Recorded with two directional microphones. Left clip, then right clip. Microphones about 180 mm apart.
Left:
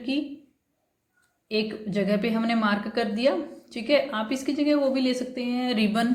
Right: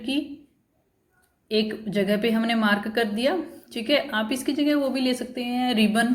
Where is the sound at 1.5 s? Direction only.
15° right (ahead or behind).